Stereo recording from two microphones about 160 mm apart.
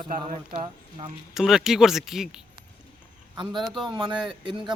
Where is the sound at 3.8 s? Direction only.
30° right (ahead or behind).